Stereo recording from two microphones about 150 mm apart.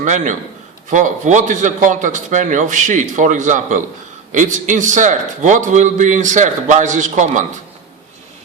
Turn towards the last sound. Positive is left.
turn(degrees=-55)  # may be behind; listen again after turning